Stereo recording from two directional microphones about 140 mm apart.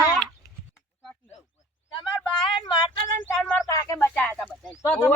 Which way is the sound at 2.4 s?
30° left (ahead or behind).